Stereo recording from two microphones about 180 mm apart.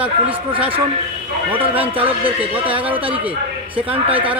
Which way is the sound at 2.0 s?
30° right (ahead or behind).